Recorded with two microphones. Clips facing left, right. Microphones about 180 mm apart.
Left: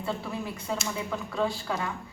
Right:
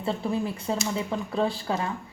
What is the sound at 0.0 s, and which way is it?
Speech, 30° right (ahead or behind).